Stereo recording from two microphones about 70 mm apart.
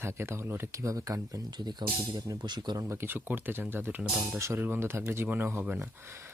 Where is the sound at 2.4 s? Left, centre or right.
Right.